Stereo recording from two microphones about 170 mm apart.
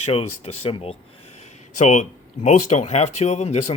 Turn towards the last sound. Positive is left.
turn(degrees=40)  # may be behind; listen again after turning